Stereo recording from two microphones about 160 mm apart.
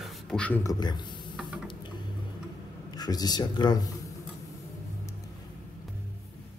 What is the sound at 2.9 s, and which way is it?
Speech, 25° left (ahead or behind).